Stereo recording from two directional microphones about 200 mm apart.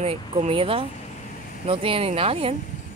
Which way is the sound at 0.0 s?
30° right (ahead or behind).